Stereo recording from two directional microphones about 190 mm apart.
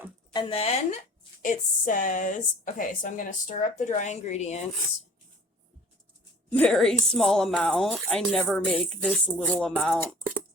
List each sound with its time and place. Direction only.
0.3 s a woman's voice: 30° left (ahead or behind)
6.5 s speech: 5° left (ahead or behind)